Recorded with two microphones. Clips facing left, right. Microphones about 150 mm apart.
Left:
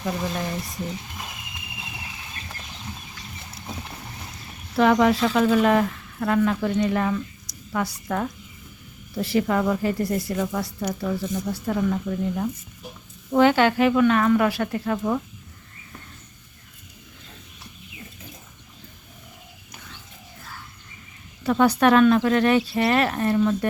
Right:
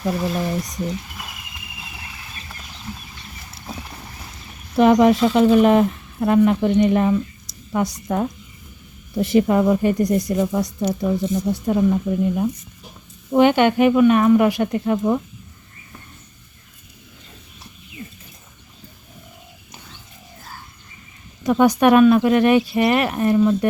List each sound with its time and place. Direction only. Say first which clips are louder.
0.0 s speech: right 5 dB; 5° right (ahead or behind)
4.8 s speech: right 5 dB; 20° right (ahead or behind)
21.4 s speech: right 3 dB; 15° right (ahead or behind)